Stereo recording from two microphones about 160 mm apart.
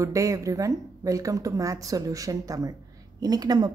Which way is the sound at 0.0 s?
20° right (ahead or behind).